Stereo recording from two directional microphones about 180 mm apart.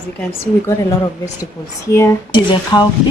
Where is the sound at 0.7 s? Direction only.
15° left (ahead or behind).